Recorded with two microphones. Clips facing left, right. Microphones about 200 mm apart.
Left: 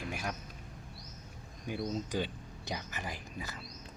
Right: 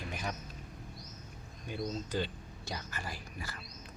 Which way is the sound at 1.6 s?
15° left (ahead or behind).